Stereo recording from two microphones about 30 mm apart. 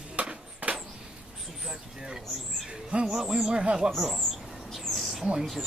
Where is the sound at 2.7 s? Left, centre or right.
Right.